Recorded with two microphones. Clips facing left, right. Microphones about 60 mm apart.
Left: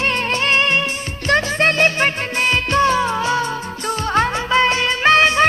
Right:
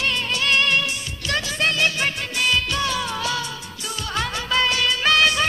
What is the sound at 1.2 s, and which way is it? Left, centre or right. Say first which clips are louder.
Music: left 7 dB; left.